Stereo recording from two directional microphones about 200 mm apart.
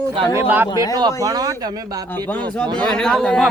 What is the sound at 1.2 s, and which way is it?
Speech, 20° right (ahead or behind).